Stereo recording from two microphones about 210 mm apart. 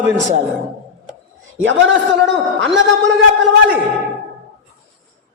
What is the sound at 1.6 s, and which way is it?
A man's voice, 65° right (ahead or behind).